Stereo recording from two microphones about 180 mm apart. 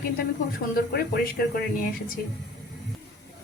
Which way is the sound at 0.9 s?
55° left (ahead or behind).